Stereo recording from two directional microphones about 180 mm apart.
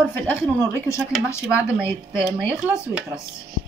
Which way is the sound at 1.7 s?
5° right (ahead or behind).